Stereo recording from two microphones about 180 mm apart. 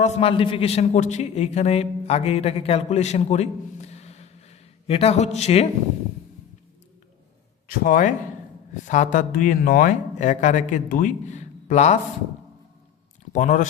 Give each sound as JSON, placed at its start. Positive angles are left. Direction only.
{"t": 0.0, "sound": "a man's voice", "side_deg": 30}
{"t": 7.7, "sound": "a man's voice", "side_deg": 50}
{"t": 13.3, "sound": "a man's voice", "side_deg": 45}